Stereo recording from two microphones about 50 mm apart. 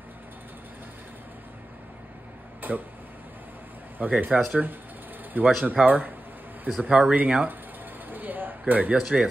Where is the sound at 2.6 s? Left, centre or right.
Right.